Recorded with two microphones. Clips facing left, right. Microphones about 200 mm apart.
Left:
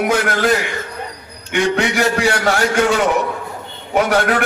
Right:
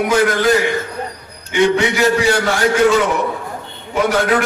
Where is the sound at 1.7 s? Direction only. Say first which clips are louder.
Right 2 dB; 60° left (ahead or behind).